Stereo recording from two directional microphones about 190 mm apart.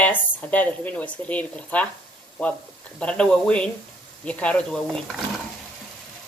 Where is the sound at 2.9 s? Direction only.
5° left (ahead or behind).